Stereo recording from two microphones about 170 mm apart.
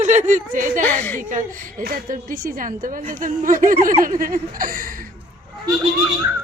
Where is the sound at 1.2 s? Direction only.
50° right (ahead or behind).